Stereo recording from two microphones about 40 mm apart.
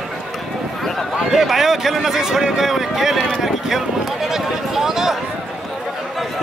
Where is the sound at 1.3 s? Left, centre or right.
Centre.